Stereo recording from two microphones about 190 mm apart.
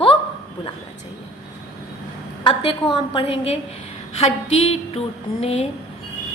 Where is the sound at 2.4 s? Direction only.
25° left (ahead or behind).